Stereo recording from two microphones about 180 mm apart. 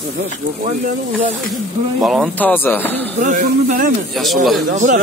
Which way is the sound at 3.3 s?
45° right (ahead or behind).